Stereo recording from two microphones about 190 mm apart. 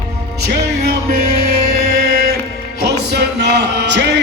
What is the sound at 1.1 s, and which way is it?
Music, 50° right (ahead or behind).